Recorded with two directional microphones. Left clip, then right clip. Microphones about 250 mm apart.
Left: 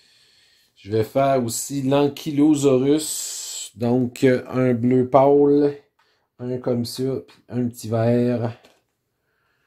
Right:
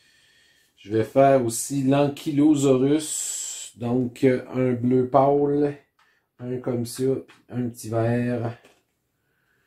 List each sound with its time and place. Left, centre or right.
0.7 s speech: left